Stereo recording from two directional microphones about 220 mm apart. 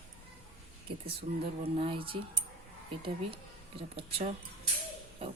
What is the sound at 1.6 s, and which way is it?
Speech, 25° right (ahead or behind).